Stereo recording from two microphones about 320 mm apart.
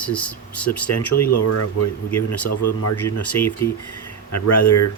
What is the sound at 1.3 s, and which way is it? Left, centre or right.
Speech, left.